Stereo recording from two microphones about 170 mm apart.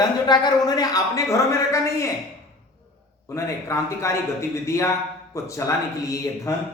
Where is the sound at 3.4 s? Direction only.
15° left (ahead or behind).